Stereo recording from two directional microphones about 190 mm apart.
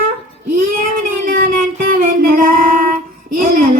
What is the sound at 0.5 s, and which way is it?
Child singing, 45° right (ahead or behind).